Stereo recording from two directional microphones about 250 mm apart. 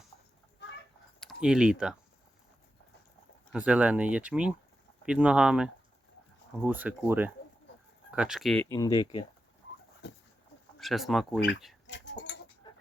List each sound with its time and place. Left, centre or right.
1.2 s speech: centre
3.5 s speech: centre
8.7 s speech: centre
10.0 s a sound: left
10.8 s speech: centre
11.3 s speech: left
11.9 s a sound: left
12.7 s chicken: centre